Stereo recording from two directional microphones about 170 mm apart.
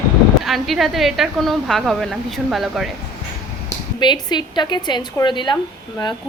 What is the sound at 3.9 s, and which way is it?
A woman's voice, 25° left (ahead or behind).